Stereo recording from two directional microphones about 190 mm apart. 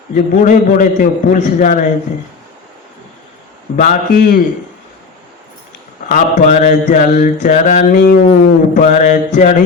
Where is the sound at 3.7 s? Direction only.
40° left (ahead or behind).